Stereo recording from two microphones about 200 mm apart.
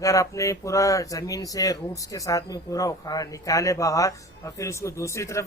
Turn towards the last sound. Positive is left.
turn(degrees=15)  # may be behind; listen again after turning